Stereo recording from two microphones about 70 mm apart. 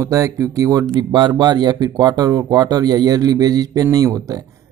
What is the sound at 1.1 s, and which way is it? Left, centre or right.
Speech, right.